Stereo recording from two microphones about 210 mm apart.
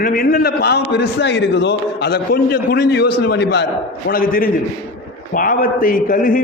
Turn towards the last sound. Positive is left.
turn(degrees=40)  # may be behind; listen again after turning